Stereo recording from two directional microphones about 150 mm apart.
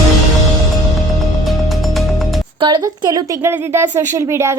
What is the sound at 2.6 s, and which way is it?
A woman's voice, 30° right (ahead or behind).